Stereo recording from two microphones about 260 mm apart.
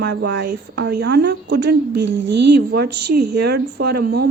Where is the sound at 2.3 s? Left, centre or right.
Right.